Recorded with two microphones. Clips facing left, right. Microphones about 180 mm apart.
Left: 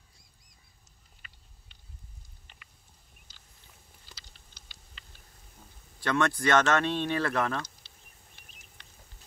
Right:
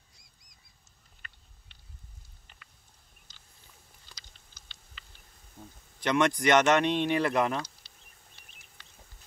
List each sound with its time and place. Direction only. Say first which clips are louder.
5.9 s speech: right 2 dB; 20° right (ahead or behind)